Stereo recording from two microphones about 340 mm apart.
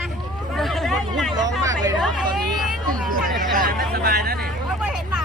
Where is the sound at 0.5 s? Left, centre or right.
Centre.